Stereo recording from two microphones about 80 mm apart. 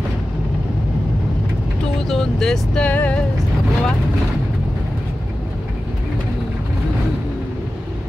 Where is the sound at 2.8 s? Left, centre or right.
Centre.